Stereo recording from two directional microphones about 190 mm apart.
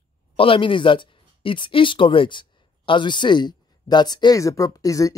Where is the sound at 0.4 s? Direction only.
25° left (ahead or behind).